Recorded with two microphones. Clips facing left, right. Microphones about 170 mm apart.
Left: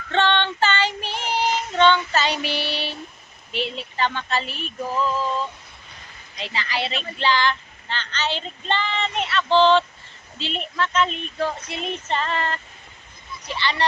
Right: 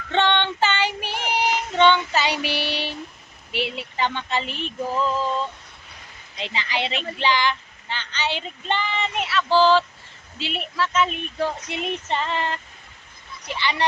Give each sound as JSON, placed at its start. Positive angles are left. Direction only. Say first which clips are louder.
{"t": 0.1, "sound": "child singing", "louder": "even", "side_deg": -15}
{"t": 6.3, "sound": "speech", "louder": "even", "side_deg": -20}
{"t": 7.2, "sound": "child singing", "louder": "left 1 dB", "side_deg": -15}